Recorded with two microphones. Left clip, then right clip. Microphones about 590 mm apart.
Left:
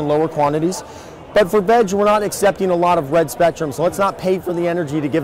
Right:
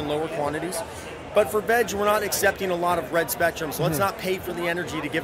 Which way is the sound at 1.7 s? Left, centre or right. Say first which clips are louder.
Left 8 dB; left.